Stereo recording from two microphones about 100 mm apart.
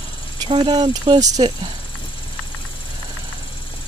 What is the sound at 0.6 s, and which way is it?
Speech, 50° right (ahead or behind).